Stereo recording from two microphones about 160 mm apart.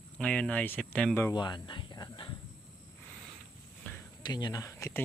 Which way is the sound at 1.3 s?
30° left (ahead or behind).